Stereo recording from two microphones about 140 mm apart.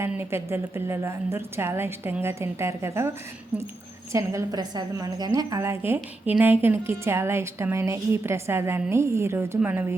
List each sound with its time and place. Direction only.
0.0 s a woman's voice: 20° right (ahead or behind)
4.1 s a woman's voice: 20° right (ahead or behind)